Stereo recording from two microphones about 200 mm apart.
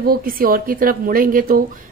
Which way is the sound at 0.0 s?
45° right (ahead or behind).